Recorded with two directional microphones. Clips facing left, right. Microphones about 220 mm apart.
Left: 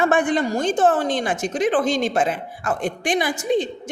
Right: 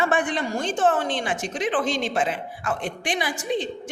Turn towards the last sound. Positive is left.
turn(degrees=45)  # may be behind; listen again after turning